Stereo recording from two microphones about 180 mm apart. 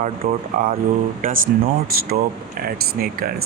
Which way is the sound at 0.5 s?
45° right (ahead or behind).